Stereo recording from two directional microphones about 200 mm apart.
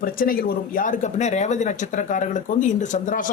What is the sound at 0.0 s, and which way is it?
A man's voice, 45° left (ahead or behind).